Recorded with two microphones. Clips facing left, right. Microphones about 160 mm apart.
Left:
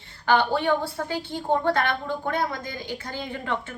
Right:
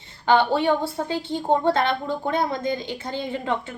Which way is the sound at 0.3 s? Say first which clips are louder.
Right 3 dB; 20° right (ahead or behind).